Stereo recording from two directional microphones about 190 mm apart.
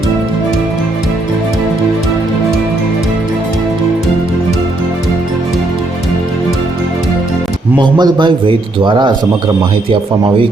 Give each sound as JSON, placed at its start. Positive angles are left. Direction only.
{"t": 7.8, "sound": "a man's voice", "side_deg": -25}